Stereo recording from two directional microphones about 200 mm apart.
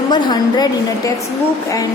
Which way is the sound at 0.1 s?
20° left (ahead or behind).